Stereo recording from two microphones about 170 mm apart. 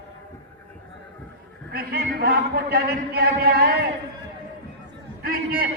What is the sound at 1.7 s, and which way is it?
A man's voice, 60° right (ahead or behind).